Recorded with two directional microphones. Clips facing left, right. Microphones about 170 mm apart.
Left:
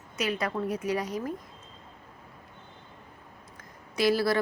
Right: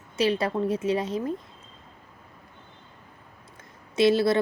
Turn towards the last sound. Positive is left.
turn(degrees=-25)  # may be behind; listen again after turning